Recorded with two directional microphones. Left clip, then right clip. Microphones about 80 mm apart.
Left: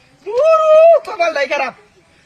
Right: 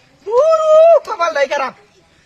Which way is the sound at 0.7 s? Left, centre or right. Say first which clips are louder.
Right 1 dB; right.